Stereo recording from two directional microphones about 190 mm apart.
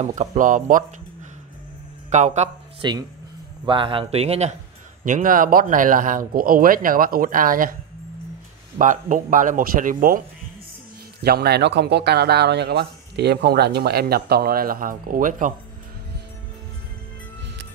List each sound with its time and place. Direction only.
0.0 s speech: 35° right (ahead or behind)
2.0 s speech: 40° right (ahead or behind)
2.8 s speech: 25° right (ahead or behind); by 7.7 s 45° right (ahead or behind)
8.7 s speech: 45° right (ahead or behind)
11.2 s speech: 55° right (ahead or behind)